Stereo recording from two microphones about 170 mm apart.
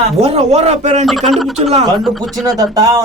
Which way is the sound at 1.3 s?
Centre (ahead or behind).